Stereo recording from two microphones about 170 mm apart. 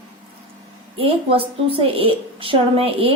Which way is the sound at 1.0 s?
30° right (ahead or behind).